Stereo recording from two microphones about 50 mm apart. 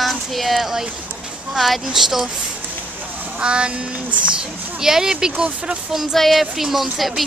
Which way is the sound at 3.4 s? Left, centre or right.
Right.